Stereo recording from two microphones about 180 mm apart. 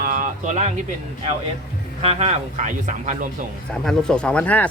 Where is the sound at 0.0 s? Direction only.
50° right (ahead or behind).